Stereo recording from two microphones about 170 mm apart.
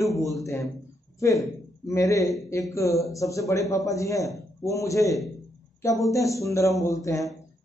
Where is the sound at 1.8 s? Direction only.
20° left (ahead or behind).